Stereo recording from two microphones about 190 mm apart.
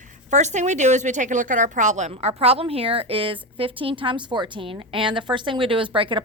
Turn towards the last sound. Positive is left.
turn(degrees=-25)  # may be behind; listen again after turning